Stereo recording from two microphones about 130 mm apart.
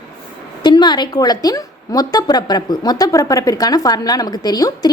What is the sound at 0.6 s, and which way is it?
A woman's voice, 35° left (ahead or behind).